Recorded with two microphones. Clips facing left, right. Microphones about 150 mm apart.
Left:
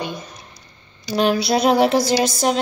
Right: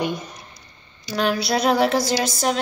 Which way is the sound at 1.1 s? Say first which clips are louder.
Left 4 dB; 20° left (ahead or behind).